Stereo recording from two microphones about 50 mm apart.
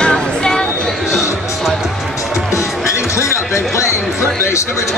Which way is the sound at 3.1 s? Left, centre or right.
Left.